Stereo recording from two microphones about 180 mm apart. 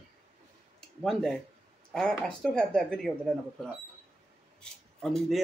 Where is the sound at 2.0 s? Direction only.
5° left (ahead or behind).